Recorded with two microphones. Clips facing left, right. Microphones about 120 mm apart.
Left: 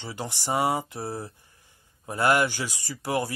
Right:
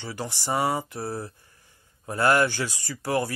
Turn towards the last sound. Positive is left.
turn(degrees=15)  # may be behind; listen again after turning